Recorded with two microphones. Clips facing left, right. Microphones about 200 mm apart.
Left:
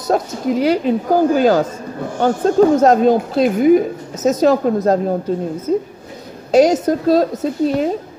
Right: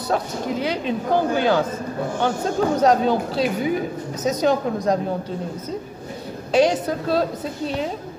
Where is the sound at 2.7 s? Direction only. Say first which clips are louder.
Left 6 dB; 50° left (ahead or behind).